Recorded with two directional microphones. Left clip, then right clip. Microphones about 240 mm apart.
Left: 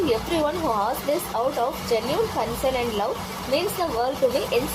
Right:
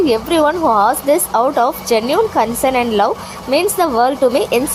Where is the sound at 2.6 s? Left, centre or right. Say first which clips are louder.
Right 9 dB; right.